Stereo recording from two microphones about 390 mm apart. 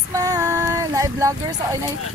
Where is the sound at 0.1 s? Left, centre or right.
Centre.